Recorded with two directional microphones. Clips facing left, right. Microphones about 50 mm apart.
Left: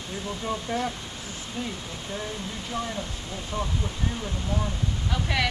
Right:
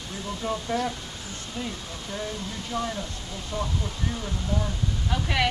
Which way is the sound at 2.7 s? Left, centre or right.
Left.